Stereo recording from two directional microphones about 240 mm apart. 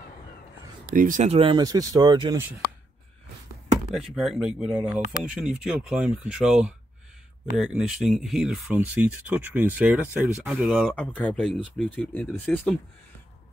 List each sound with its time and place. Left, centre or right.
0.9 s speech: right; by 2.4 s centre
3.9 s speech: centre